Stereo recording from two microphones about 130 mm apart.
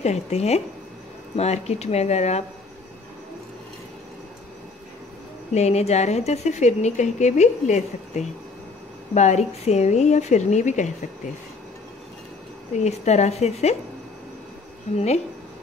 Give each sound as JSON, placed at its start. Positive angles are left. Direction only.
{"t": 0.0, "sound": "a woman's voice", "side_deg": 60}
{"t": 5.5, "sound": "a woman's voice", "side_deg": 60}
{"t": 12.8, "sound": "a woman's voice", "side_deg": 60}